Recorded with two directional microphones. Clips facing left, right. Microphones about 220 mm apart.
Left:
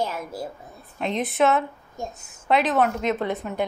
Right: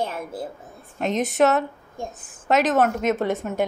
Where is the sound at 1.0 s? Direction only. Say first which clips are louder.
Right 2 dB; 45° right (ahead or behind).